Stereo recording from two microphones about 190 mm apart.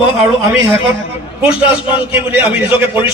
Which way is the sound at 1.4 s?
10° right (ahead or behind).